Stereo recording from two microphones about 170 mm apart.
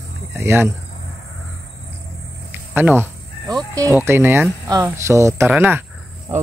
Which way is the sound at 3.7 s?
15° right (ahead or behind).